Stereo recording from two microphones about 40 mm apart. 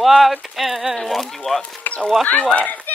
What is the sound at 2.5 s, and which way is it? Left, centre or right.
Speech, left.